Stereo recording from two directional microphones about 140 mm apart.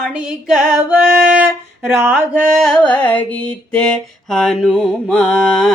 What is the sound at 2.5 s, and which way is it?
Mantra, 5° left (ahead or behind).